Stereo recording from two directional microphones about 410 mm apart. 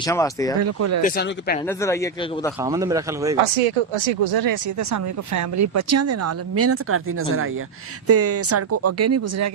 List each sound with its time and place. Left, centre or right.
0.0 s speech: centre
0.6 s speech: right
1.0 s speech: left
1.6 s speech: centre
2.6 s a man's voice: centre
3.9 s speech: right